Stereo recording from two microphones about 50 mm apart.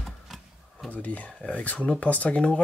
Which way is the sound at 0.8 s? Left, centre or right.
Left.